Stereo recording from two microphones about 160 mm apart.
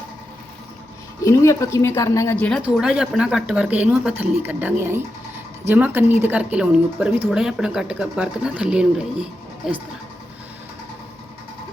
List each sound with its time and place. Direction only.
1.2 s speech: 20° left (ahead or behind)
2.7 s speech: 5° right (ahead or behind)